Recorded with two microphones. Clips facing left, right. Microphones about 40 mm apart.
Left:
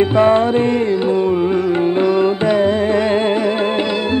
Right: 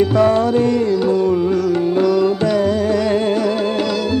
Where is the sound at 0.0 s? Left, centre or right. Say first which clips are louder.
Left 1 dB; left.